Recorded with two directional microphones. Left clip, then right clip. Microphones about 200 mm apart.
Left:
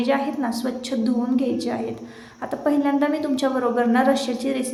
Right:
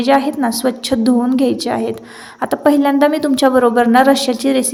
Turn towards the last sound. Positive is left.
turn(degrees=-45)  # may be behind; listen again after turning